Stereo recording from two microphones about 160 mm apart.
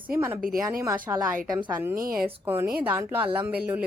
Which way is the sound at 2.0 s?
65° right (ahead or behind).